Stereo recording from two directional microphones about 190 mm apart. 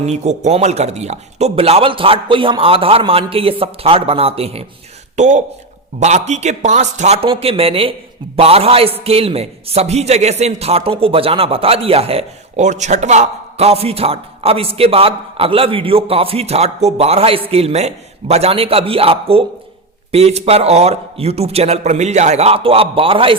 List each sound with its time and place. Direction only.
0.0 s a man's voice: 35° right (ahead or behind)